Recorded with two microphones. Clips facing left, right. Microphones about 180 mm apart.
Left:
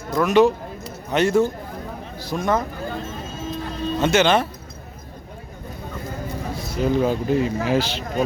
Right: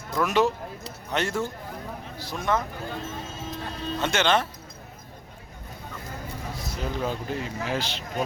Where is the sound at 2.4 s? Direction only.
40° left (ahead or behind).